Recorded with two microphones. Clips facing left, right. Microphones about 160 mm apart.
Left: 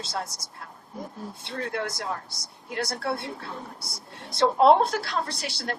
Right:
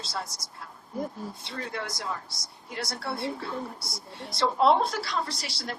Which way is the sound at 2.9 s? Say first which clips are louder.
Left 2 dB; centre (ahead or behind).